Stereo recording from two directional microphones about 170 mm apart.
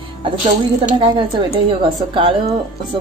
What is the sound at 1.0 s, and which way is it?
Speech, 30° right (ahead or behind).